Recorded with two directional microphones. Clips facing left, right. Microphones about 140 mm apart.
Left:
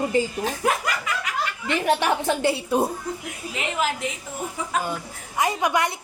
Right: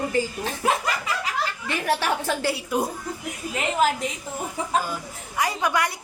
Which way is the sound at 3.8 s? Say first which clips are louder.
Right 4 dB; 40° right (ahead or behind).